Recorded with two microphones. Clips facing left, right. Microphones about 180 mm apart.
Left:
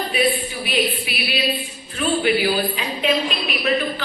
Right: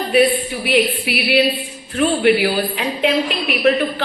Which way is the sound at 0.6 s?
65° right (ahead or behind).